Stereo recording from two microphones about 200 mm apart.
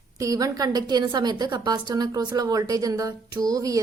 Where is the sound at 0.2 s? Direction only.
15° right (ahead or behind).